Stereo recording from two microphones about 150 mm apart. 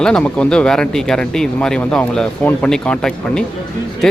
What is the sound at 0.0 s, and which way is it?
A man's voice, 5° left (ahead or behind).